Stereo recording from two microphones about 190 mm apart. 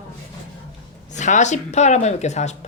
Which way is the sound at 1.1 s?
40° left (ahead or behind).